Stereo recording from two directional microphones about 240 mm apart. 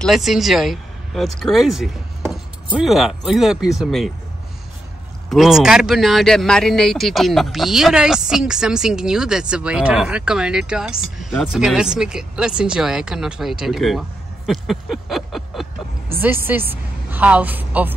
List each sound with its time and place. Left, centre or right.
0.0 s speech: centre
5.3 s a woman's voice: centre